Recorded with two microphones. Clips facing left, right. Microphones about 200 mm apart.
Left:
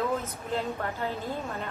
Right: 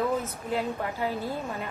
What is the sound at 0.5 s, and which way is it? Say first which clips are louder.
Speech: right 1 dB; 15° right (ahead or behind).